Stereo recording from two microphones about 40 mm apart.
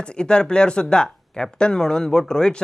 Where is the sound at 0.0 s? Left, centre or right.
Left.